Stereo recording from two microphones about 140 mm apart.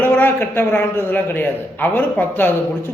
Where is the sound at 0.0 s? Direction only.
15° left (ahead or behind).